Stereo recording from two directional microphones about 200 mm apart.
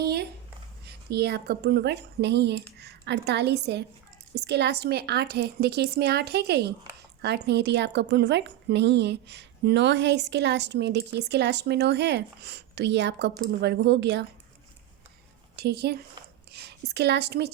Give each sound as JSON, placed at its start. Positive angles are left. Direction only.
{"t": 0.0, "sound": "a sound", "side_deg": -55}
{"t": 0.9, "sound": "a woman's voice", "side_deg": -55}
{"t": 15.5, "sound": "a woman's voice", "side_deg": -55}